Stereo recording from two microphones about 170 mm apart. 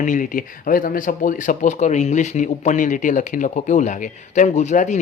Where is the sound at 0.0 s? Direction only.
50° left (ahead or behind).